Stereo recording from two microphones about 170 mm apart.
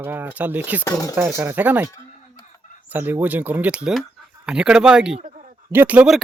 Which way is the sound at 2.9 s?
10° right (ahead or behind).